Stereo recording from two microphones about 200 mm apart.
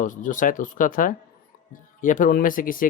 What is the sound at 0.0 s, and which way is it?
Speech, 40° left (ahead or behind).